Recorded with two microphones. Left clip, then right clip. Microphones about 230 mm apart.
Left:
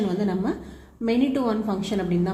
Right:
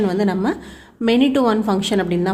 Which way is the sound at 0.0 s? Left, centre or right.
Right.